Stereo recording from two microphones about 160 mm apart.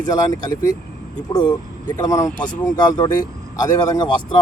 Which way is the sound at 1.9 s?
25° left (ahead or behind).